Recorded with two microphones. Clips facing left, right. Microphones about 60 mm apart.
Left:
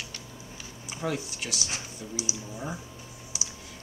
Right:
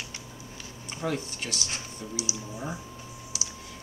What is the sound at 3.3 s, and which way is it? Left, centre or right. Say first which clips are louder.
Computer keyboard: even; left.